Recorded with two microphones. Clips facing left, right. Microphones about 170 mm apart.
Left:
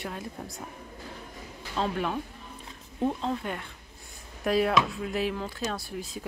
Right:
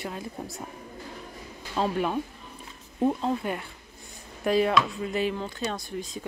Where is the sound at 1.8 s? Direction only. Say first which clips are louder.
Right 3 dB; 10° right (ahead or behind).